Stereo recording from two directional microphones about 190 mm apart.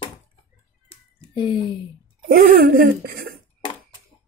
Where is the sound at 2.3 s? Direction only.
50° right (ahead or behind).